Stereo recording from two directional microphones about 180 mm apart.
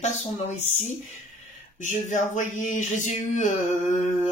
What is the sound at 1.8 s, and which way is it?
Speech, 45° left (ahead or behind).